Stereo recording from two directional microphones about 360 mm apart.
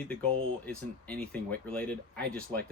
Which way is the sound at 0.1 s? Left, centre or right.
Centre.